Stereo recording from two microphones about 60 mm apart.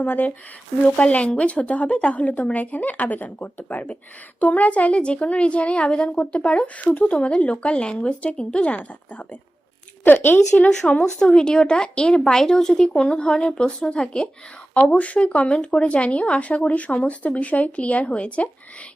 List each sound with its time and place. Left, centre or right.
0.0 s speech: left
10.0 s a woman's voice: left
10.7 s speech: centre